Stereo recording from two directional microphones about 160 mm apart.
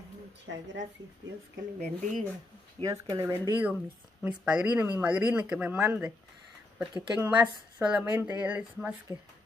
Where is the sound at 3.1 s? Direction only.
25° right (ahead or behind).